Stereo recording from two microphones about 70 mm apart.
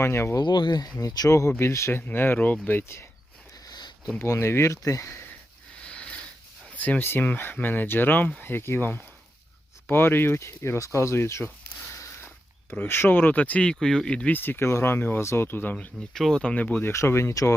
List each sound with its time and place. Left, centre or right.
0.0 s speech: left
0.3 s speech: left
0.9 s speech: left
1.3 s speech: left
1.9 s speech: left
3.7 s a sound: left
4.2 s speech: left
4.8 s speech: left
5.8 s sniff: centre
6.7 s speech: left
12.9 s speech: left; by 14.3 s centre
14.3 s speech: left
16.1 s speech: centre
16.8 s speech: left